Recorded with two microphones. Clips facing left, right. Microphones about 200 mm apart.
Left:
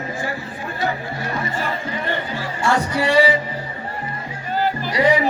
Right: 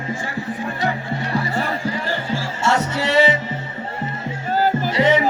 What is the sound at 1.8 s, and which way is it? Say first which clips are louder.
Music: right 1 dB; 30° right (ahead or behind).